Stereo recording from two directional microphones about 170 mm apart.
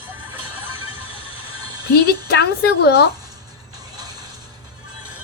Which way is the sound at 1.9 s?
70° left (ahead or behind).